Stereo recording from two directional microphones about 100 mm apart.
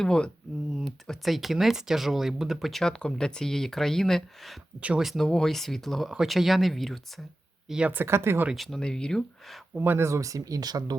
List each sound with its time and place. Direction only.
0.0 s speech: 5° left (ahead or behind)
4.8 s speech: 10° right (ahead or behind)
5.0 s speech: 5° left (ahead or behind)
7.7 s speech: 10° right (ahead or behind)
7.9 s speech: 25° right (ahead or behind)
8.5 s speech: centre (ahead or behind)
9.7 s speech: 20° right (ahead or behind); by 10.9 s 40° right (ahead or behind)